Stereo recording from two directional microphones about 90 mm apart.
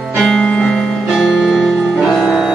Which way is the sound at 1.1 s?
5° right (ahead or behind).